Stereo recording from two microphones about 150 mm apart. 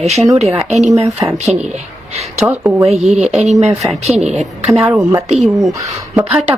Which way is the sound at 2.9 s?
45° right (ahead or behind).